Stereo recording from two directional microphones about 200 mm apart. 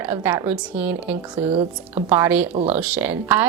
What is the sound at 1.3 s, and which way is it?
Speech, 25° right (ahead or behind).